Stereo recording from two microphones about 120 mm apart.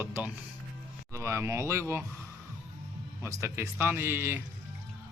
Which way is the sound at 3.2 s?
25° right (ahead or behind).